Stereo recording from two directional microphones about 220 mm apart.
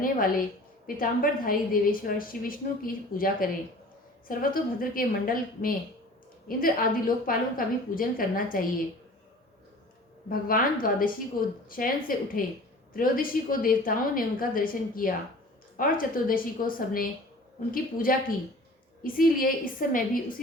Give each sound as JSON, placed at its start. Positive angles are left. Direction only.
{"t": 0.0, "sound": "a woman's voice", "side_deg": 40}
{"t": 10.2, "sound": "a woman's voice", "side_deg": 40}